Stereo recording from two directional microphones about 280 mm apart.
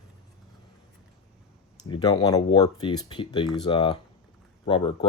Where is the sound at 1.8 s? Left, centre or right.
Centre.